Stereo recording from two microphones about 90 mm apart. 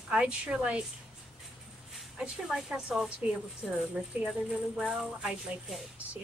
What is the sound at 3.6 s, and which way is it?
A woman's voice, centre (ahead or behind).